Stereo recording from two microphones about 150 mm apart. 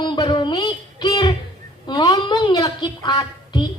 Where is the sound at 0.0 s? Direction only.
30° left (ahead or behind).